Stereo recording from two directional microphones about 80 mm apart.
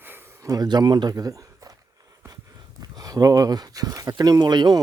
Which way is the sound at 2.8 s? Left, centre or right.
Right.